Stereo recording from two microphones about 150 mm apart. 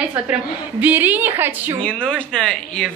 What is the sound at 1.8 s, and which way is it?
Speech, 5° left (ahead or behind).